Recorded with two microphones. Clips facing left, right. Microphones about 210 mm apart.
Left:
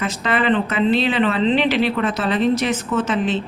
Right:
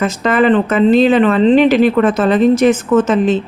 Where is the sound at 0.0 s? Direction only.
45° right (ahead or behind).